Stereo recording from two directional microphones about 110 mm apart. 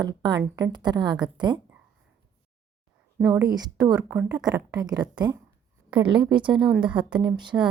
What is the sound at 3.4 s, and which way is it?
A woman's voice, 35° right (ahead or behind).